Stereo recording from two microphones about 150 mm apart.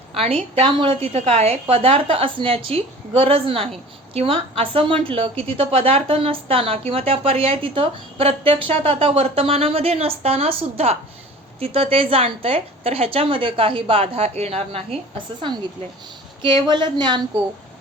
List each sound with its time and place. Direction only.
0.1 s a woman's voice: 40° right (ahead or behind)
16.4 s a woman's voice: 30° right (ahead or behind)